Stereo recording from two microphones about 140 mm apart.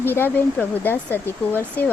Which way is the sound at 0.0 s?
15° left (ahead or behind).